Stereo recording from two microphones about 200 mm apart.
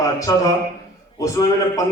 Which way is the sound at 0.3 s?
15° left (ahead or behind).